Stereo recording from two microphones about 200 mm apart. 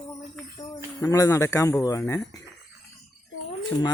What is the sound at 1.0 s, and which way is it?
Speech, 15° left (ahead or behind).